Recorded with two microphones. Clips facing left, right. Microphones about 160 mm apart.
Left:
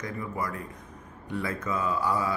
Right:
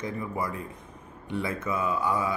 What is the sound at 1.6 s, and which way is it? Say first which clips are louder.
Speech: even; 10° right (ahead or behind).